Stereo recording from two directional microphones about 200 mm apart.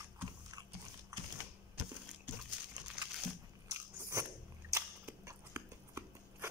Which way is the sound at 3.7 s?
15° right (ahead or behind).